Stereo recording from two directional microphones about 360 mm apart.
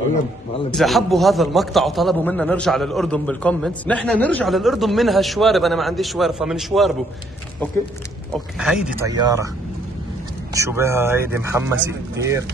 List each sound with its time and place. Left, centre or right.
0.7 s a man's voice: centre
8.3 s a man's voice: centre
10.5 s speech: centre